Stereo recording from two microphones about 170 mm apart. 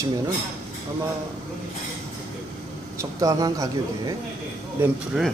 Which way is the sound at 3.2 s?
20° right (ahead or behind).